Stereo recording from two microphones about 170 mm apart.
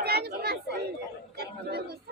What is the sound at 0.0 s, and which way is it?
Chatter, 70° right (ahead or behind).